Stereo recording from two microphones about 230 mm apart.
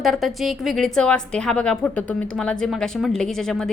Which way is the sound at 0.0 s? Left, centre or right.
Centre.